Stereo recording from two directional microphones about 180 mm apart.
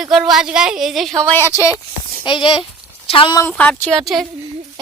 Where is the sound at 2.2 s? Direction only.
25° left (ahead or behind).